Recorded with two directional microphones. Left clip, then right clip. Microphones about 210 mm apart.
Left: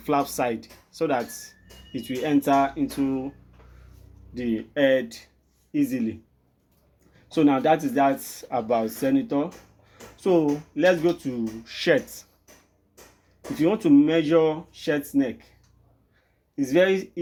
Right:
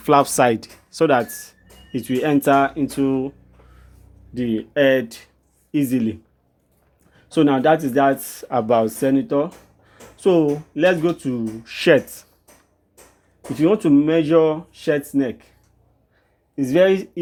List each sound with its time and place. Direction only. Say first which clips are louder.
0.0 s speech: right 9 dB; 45° right (ahead or behind)
4.4 s speech: right 5 dB; 35° right (ahead or behind)
5.7 s speech: right 5 dB; 45° right (ahead or behind)
7.3 s speech: right 4 dB; 40° right (ahead or behind)
13.6 s speech: right 3 dB; 35° right (ahead or behind)
16.6 s speech: right 5 dB; 40° right (ahead or behind)